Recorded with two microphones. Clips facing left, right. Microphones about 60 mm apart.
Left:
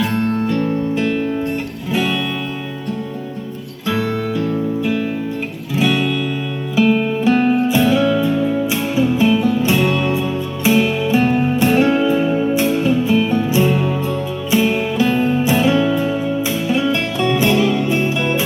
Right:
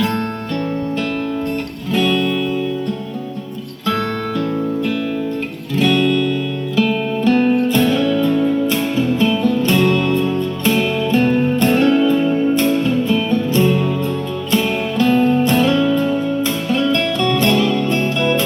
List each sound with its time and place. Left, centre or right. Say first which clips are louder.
0.0 s music: left 2 dB; centre
3.8 s music: even; centre
5.7 s music: right 2 dB; centre